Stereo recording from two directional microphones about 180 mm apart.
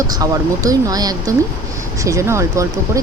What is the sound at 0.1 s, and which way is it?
Speech, 20° right (ahead or behind).